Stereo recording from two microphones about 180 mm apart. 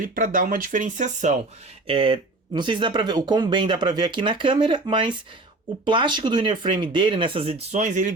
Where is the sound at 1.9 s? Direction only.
30° right (ahead or behind).